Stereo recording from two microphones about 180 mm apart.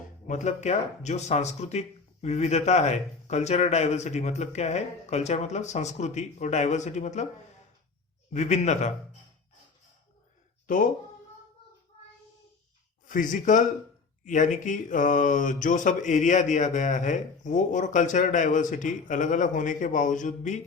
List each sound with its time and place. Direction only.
0.3 s speech: 40° left (ahead or behind)
8.3 s speech: 40° left (ahead or behind)
13.1 s speech: 45° left (ahead or behind)